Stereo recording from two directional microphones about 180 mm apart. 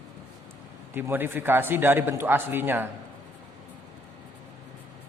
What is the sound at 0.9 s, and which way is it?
A man's voice, 10° right (ahead or behind).